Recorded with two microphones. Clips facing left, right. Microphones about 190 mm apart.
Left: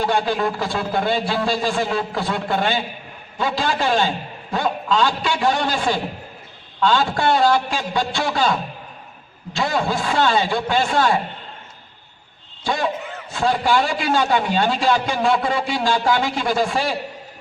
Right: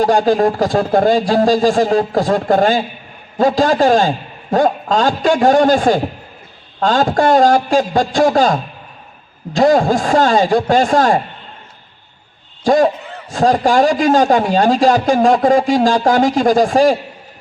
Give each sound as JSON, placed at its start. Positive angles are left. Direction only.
{"t": 0.0, "sound": "a man's voice", "side_deg": -40}
{"t": 9.6, "sound": "a man's voice", "side_deg": -45}
{"t": 12.6, "sound": "a man's voice", "side_deg": -45}